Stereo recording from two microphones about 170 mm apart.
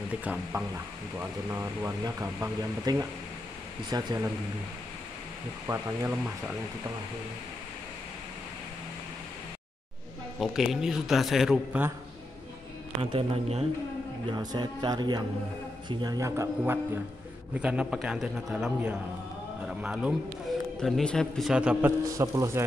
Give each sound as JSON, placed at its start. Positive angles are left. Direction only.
{"t": 0.1, "sound": "speech", "side_deg": -10}
{"t": 5.7, "sound": "speech", "side_deg": -10}
{"t": 10.4, "sound": "a man's voice", "side_deg": 0}
{"t": 13.0, "sound": "speech", "side_deg": -35}
{"t": 14.3, "sound": "a man's voice", "side_deg": -25}
{"t": 22.1, "sound": "speech", "side_deg": -20}